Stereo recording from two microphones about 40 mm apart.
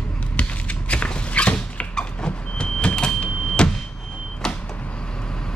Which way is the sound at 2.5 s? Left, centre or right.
Left.